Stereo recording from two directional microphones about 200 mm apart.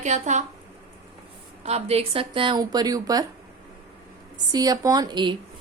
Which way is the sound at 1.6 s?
30° right (ahead or behind).